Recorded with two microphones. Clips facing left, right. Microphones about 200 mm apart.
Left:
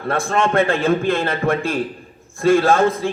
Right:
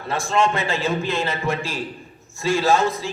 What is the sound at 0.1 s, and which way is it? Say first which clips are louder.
A man's voice: left 2 dB; 55° left (ahead or behind).